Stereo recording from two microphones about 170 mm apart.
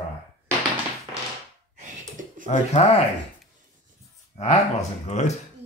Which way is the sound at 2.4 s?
40° left (ahead or behind).